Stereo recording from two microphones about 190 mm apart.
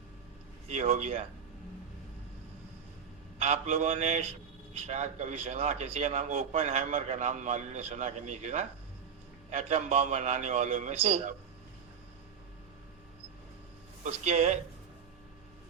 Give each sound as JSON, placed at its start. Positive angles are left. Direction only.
{"t": 0.7, "sound": "a man's voice", "side_deg": -35}
{"t": 3.3, "sound": "a man's voice", "side_deg": -35}
{"t": 14.0, "sound": "a man's voice", "side_deg": -35}